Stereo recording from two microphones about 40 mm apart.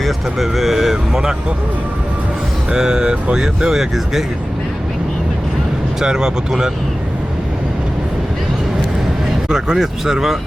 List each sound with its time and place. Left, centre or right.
0.0 s speech: centre
2.7 s speech: centre
6.0 s speech: centre
9.5 s speech: centre